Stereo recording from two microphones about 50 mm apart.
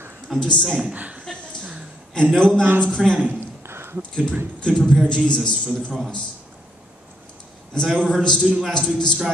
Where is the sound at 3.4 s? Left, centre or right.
Right.